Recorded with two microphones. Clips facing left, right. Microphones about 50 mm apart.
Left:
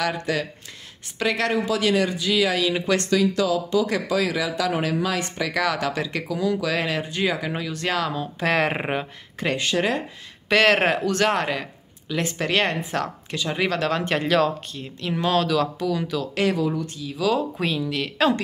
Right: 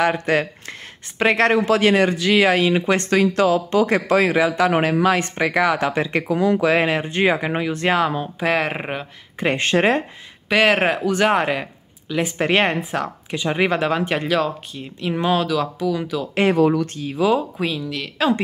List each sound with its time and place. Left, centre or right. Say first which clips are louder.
0.0 s a man's voice: right 6 dB; right
2.7 s speech: right 4 dB; right
3.1 s a man's voice: right 5 dB; right
5.5 s speech: right 5 dB; right
8.4 s speech: even; centre
9.6 s speech: right 6 dB; right
10.5 s speech: right 1 dB; centre
12.4 s speech: right 5 dB; right
12.9 s speech: right 2 dB; centre
13.4 s speech: right 4 dB; right; by 16.3 s centre
16.5 s a man's voice: right 8 dB; right
17.6 s speech: even; centre